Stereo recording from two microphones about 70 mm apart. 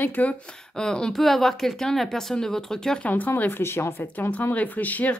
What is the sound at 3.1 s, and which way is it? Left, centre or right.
Speech, left.